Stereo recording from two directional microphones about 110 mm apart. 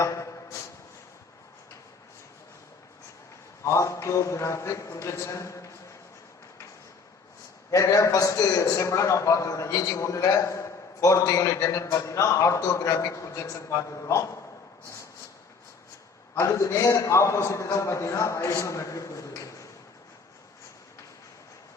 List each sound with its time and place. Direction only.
0.0 s a sound: 30° left (ahead or behind)
3.6 s a man's voice: 25° left (ahead or behind)
7.7 s a man's voice: 30° left (ahead or behind)
16.3 s a man's voice: 25° left (ahead or behind)